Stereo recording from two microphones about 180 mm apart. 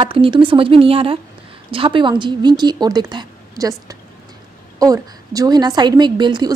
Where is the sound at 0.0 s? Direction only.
30° right (ahead or behind).